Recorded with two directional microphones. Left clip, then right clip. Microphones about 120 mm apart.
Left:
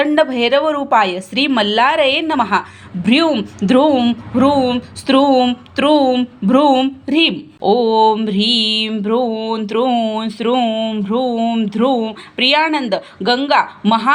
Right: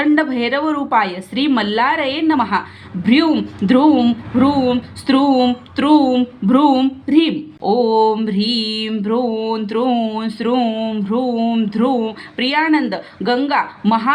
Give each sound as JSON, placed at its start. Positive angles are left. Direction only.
{"t": 0.0, "sound": "speech", "side_deg": 40}
{"t": 3.7, "sound": "a woman's voice", "side_deg": 35}
{"t": 5.7, "sound": "speech", "side_deg": 40}